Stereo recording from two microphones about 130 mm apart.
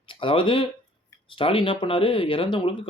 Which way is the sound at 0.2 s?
40° left (ahead or behind).